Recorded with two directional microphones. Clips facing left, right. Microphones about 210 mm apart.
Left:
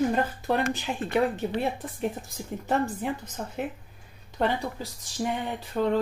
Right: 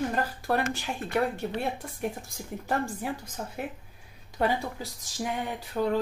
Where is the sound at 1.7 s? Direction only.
Centre (ahead or behind).